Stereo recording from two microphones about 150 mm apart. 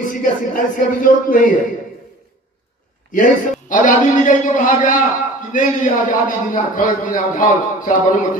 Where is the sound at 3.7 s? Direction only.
60° left (ahead or behind).